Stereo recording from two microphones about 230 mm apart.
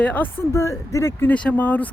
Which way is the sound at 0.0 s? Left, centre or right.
Centre.